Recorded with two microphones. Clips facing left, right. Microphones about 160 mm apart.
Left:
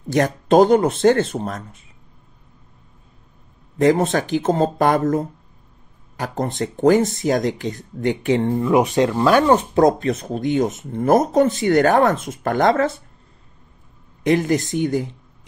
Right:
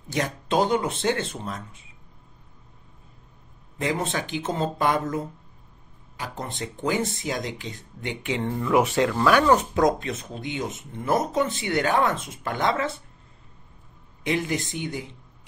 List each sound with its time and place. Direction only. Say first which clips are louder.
0.1 s speech: left 10 dB; 45° left (ahead or behind)
3.7 s speech: left 11 dB; 40° left (ahead or behind)
8.5 s speech: left 1 dB; 20° left (ahead or behind); by 12.9 s 45° left (ahead or behind)
14.2 s speech: left 8 dB; 45° left (ahead or behind)